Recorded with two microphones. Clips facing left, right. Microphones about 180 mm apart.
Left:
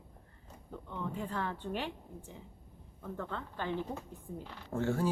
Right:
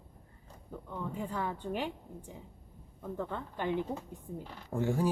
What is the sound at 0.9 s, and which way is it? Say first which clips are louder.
Speech: right 1 dB; 10° right (ahead or behind).